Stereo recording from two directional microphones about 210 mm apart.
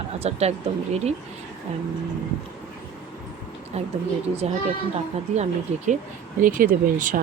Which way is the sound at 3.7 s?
30° right (ahead or behind).